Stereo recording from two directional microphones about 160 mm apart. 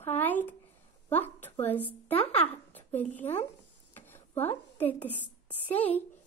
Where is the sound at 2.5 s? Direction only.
10° left (ahead or behind).